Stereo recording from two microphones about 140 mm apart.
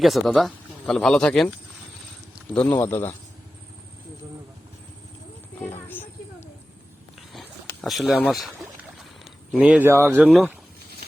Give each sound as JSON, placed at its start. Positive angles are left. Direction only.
{"t": 0.0, "sound": "speech", "side_deg": 0}
{"t": 5.5, "sound": "a sound", "side_deg": 15}
{"t": 7.9, "sound": "speech", "side_deg": 0}
{"t": 9.2, "sound": "speech", "side_deg": -5}
{"t": 10.2, "sound": "speech", "side_deg": 0}